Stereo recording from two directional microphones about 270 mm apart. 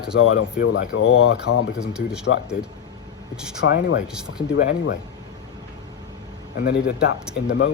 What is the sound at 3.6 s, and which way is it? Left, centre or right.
Speech, left.